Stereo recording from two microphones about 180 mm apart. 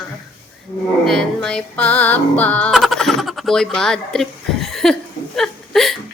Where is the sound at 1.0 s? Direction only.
5° left (ahead or behind).